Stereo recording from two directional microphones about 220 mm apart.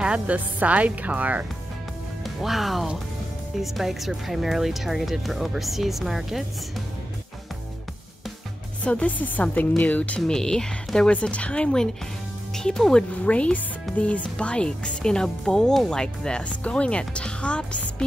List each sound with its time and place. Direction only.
0.0 s a woman's voice: 5° right (ahead or behind)
8.8 s speech: 5° left (ahead or behind)